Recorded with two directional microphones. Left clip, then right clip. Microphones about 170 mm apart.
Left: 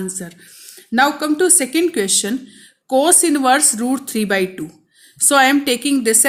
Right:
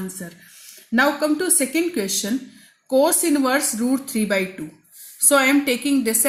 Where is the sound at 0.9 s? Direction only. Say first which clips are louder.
Left 3 dB; 45° left (ahead or behind).